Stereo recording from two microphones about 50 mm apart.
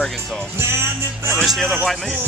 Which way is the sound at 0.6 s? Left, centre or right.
Right.